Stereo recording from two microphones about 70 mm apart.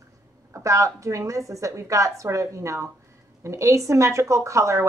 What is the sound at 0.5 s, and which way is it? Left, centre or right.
Speech, right.